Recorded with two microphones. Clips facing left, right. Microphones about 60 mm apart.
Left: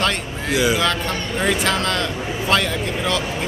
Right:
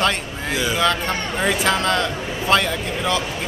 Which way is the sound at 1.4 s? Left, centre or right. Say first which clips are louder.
Right 1 dB; centre.